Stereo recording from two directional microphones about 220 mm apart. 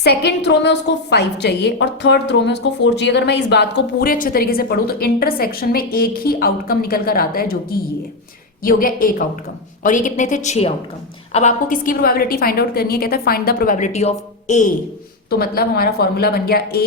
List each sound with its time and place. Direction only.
0.0 s a woman's voice: 50° left (ahead or behind); by 14.7 s 30° left (ahead or behind)
15.3 s a woman's voice: 45° left (ahead or behind)